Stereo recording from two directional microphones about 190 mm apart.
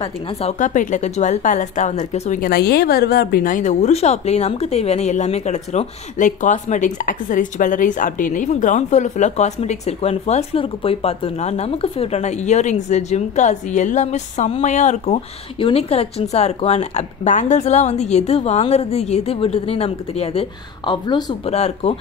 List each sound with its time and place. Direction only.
0.3 s speech: 35° left (ahead or behind)
21.5 s speech: 35° left (ahead or behind)